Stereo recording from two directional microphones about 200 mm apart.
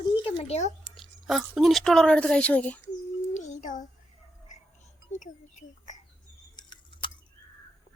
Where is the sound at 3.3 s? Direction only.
40° left (ahead or behind).